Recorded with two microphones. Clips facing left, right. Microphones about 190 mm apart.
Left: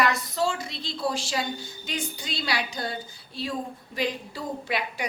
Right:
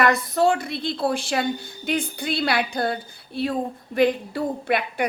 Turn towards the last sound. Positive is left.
turn(degrees=-55)  # may be behind; listen again after turning